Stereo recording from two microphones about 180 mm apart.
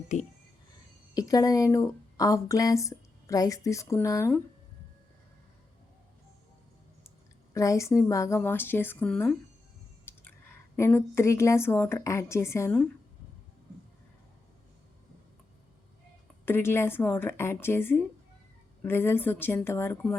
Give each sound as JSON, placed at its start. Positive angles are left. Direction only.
{"t": 1.1, "sound": "speech", "side_deg": 20}
{"t": 7.5, "sound": "a woman's voice", "side_deg": 15}
{"t": 10.1, "sound": "chewing", "side_deg": 10}
{"t": 10.8, "sound": "a woman's voice", "side_deg": 15}
{"t": 16.5, "sound": "a woman's voice", "side_deg": 10}